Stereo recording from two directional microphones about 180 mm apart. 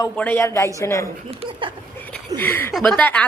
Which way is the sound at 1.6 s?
30° right (ahead or behind).